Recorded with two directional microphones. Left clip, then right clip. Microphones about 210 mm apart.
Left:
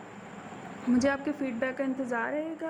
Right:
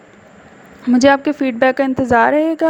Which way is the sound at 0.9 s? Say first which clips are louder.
Right 16 dB; 40° right (ahead or behind).